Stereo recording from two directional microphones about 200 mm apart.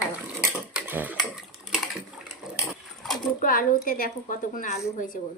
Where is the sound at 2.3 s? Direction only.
Centre (ahead or behind).